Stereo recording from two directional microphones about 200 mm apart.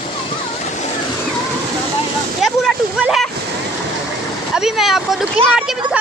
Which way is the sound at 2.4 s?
Centre (ahead or behind).